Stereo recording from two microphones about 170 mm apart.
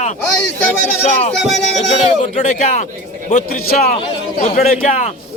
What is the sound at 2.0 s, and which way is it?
A man's voice, 45° left (ahead or behind).